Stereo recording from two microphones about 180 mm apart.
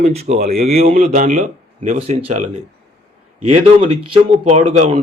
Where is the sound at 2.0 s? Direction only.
35° right (ahead or behind).